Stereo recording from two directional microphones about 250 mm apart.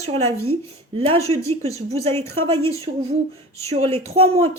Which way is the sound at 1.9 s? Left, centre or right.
Right.